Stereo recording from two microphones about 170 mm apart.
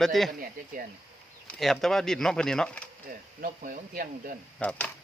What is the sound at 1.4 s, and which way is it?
Speech, 5° left (ahead or behind).